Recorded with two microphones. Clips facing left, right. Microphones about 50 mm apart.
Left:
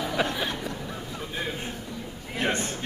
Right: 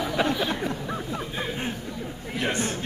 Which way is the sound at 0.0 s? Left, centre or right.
Centre.